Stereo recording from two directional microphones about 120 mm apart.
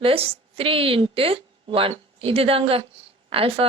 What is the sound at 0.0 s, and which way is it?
A woman's voice, 50° right (ahead or behind).